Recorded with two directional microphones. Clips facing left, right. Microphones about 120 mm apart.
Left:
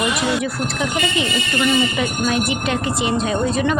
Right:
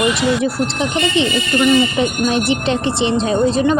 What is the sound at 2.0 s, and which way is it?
Speech, 30° right (ahead or behind).